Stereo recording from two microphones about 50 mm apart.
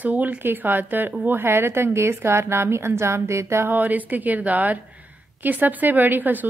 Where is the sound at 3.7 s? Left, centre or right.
Right.